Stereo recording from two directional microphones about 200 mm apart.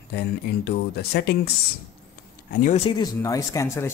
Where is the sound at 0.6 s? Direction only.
55° left (ahead or behind).